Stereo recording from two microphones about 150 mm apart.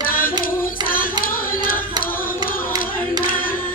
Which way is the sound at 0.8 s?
70° left (ahead or behind).